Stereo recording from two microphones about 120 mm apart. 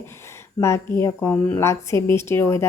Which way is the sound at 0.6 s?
25° left (ahead or behind).